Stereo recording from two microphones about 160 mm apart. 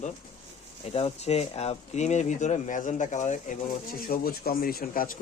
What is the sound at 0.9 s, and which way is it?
Speech, 40° left (ahead or behind).